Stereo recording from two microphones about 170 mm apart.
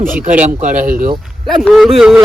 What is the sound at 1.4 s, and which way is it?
Speech, centre (ahead or behind).